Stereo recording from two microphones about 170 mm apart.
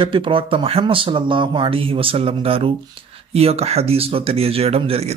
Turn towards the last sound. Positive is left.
turn(degrees=-35)  # may be behind; listen again after turning